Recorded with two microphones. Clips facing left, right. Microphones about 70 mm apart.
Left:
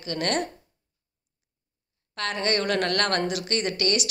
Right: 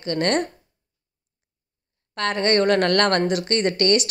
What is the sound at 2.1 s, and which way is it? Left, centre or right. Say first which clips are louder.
Speech: right 6 dB; right.